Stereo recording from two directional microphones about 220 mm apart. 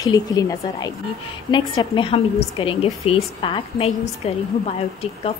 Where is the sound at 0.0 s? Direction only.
15° left (ahead or behind).